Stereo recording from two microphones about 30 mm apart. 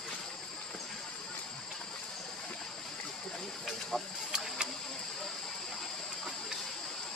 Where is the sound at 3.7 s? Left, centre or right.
Centre.